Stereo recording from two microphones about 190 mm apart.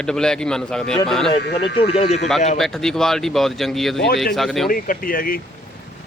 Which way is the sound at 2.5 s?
Centre (ahead or behind).